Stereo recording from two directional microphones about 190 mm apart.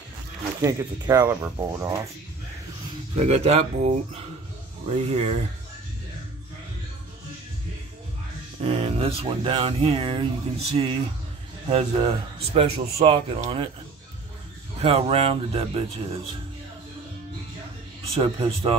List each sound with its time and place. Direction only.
0.6 s speech: 20° right (ahead or behind)
3.2 s speech: 35° right (ahead or behind)
8.7 s speech: 30° right (ahead or behind)
14.8 s speech: 30° right (ahead or behind)
18.2 s speech: 25° right (ahead or behind)